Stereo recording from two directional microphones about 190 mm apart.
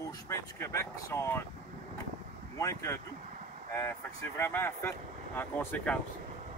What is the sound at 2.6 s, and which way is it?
Speech, 15° left (ahead or behind).